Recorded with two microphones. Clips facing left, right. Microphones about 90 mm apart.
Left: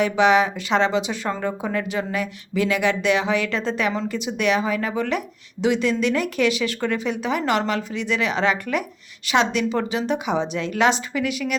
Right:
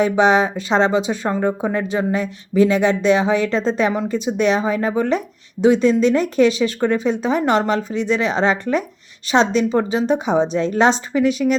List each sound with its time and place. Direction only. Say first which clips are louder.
0.0 s a woman's voice: right 2 dB; 25° right (ahead or behind)